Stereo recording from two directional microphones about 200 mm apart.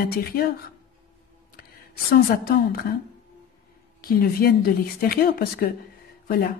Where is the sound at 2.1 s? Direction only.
50° left (ahead or behind).